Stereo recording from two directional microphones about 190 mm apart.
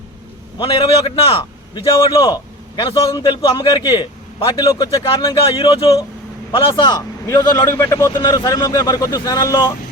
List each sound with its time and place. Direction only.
0.6 s a man's voice: 25° left (ahead or behind)